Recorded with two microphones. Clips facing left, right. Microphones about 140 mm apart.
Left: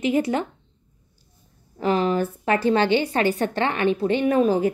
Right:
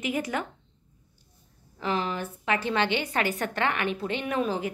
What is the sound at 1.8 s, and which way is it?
Speech, 35° left (ahead or behind).